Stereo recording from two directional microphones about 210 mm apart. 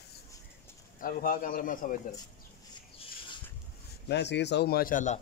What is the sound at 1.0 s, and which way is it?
Speech, 40° left (ahead or behind).